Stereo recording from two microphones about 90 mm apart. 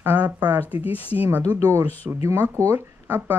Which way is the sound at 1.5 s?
30° right (ahead or behind).